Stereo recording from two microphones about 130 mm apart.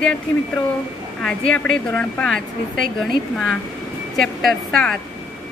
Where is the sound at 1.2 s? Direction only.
5° left (ahead or behind).